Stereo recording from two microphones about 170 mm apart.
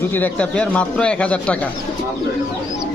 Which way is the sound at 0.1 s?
10° left (ahead or behind).